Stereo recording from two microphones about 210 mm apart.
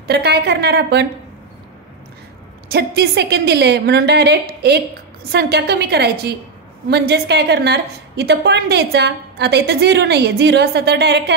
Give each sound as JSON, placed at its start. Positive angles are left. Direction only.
{"t": 0.0, "sound": "a woman's voice", "side_deg": -50}
{"t": 2.7, "sound": "a woman's voice", "side_deg": -50}